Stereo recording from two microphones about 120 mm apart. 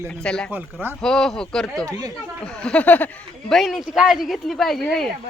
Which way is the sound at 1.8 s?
30° right (ahead or behind).